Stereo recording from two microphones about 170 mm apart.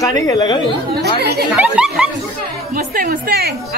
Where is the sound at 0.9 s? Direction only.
70° right (ahead or behind).